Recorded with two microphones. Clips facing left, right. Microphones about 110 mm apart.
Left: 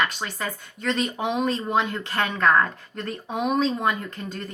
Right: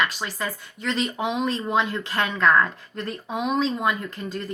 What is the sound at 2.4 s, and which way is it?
Speech, 30° left (ahead or behind).